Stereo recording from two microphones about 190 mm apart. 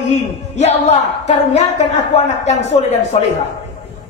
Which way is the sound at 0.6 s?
35° left (ahead or behind).